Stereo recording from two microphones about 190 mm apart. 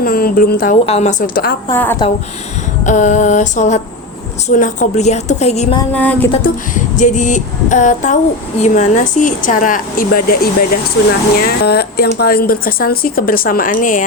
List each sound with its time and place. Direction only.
0.0 s speech: 50° left (ahead or behind)
0.9 s speech: 35° left (ahead or behind); by 1.5 s 50° left (ahead or behind)
1.7 s a sound: 10° left (ahead or behind)
2.8 s female singing: 40° left (ahead or behind)
5.9 s a sound: 10° left (ahead or behind)
6.4 s female singing: 40° left (ahead or behind)
11.3 s speech: 55° left (ahead or behind)